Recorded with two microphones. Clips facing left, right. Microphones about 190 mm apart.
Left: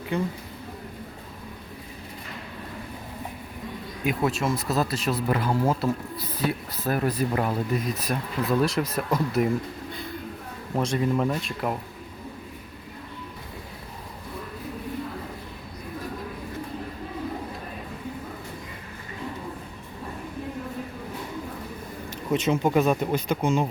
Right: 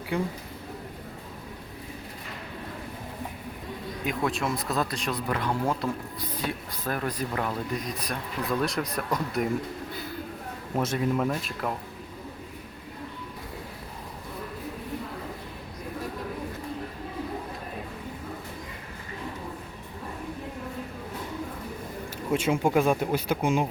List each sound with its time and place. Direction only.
0.1 s speech: 10° right (ahead or behind)
4.0 s speech: 5° left (ahead or behind)
7.3 s speech: 25° left (ahead or behind)
7.9 s speech: 5° left (ahead or behind)
10.8 s speech: 5° right (ahead or behind)
22.3 s speech: 10° right (ahead or behind)